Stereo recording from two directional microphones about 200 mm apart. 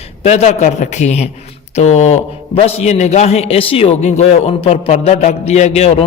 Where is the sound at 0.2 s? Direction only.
35° left (ahead or behind).